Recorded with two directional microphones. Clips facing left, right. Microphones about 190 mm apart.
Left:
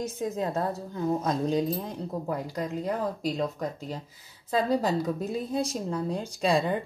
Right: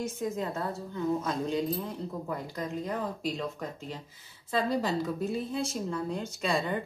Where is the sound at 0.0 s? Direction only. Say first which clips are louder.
Left 2 dB; 35° left (ahead or behind).